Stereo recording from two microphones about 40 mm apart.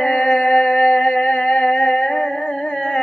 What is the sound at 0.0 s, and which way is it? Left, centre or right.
Music, left.